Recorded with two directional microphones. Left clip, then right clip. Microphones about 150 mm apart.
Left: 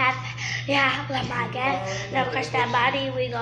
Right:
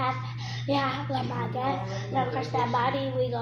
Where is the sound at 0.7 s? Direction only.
5° left (ahead or behind).